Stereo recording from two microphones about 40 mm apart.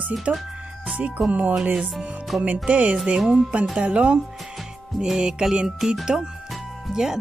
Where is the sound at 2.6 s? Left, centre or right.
Right.